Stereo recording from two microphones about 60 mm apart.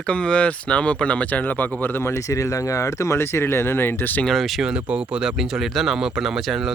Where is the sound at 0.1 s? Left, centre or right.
Centre; by 2.2 s left.